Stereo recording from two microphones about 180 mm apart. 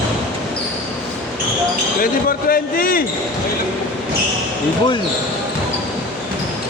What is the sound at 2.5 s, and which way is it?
Speech, 55° left (ahead or behind).